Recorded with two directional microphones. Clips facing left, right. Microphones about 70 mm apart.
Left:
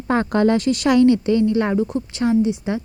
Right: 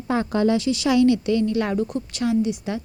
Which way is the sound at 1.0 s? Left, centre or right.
Left.